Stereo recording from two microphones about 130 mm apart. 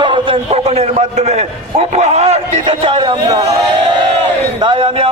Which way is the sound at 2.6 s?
45° right (ahead or behind).